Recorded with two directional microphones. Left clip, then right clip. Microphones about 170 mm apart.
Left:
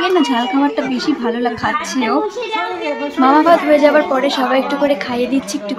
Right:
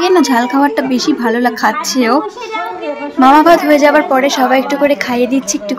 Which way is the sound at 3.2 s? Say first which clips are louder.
Right 4 dB; 35° right (ahead or behind).